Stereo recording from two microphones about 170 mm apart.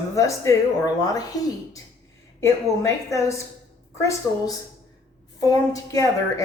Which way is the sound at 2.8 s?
15° left (ahead or behind).